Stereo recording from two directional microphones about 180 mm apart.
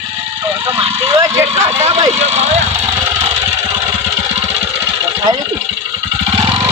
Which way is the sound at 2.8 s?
15° right (ahead or behind).